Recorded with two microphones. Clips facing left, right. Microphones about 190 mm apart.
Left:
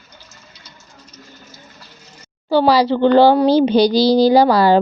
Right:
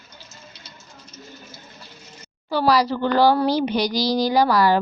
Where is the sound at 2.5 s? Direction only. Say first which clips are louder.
Left 6 dB; 30° left (ahead or behind).